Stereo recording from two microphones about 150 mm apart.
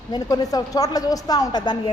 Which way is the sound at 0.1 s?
25° left (ahead or behind).